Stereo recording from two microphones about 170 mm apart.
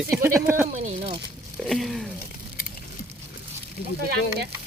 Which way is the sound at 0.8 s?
35° right (ahead or behind).